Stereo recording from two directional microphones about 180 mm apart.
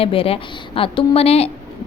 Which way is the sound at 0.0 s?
30° left (ahead or behind).